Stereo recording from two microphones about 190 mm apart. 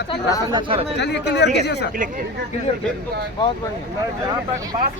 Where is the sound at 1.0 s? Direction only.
65° left (ahead or behind).